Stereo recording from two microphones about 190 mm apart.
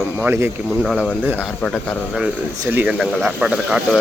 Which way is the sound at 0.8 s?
5° left (ahead or behind).